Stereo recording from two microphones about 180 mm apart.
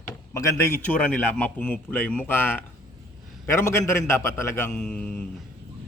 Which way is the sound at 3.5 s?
15° left (ahead or behind).